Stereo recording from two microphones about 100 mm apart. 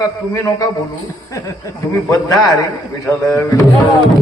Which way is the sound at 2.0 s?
35° left (ahead or behind).